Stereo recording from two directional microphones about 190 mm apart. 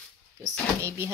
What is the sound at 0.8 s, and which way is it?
Speech, 15° right (ahead or behind).